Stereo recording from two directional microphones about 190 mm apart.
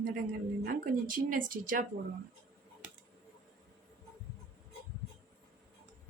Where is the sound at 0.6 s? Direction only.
45° right (ahead or behind).